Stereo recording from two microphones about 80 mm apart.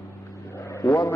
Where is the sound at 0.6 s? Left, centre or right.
Left.